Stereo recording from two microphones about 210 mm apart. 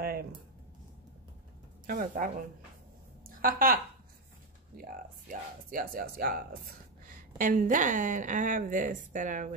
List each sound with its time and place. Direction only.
1.9 s a woman's voice: 40° right (ahead or behind)